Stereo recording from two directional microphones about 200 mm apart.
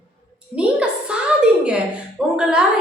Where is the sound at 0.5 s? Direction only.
5° right (ahead or behind).